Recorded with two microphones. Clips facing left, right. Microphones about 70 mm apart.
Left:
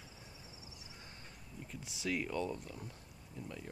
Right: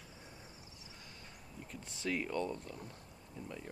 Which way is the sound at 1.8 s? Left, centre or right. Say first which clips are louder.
Even; centre.